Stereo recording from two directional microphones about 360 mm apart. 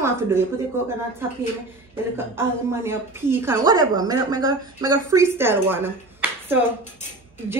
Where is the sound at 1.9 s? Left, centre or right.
Centre.